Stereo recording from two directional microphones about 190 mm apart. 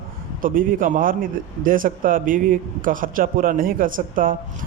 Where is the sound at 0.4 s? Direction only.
45° right (ahead or behind).